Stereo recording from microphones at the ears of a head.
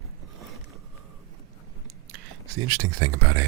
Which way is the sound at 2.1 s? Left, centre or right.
Right.